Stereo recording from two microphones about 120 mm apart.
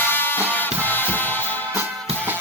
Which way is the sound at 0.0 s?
15° left (ahead or behind).